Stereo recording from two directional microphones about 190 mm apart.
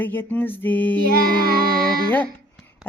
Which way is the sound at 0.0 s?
10° left (ahead or behind).